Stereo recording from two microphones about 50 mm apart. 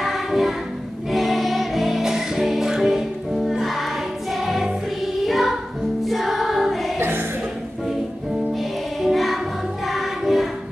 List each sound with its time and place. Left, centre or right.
0.0 s choir: centre
1.1 s music: centre
6.0 s choir: centre
7.0 s music: right
8.5 s music: centre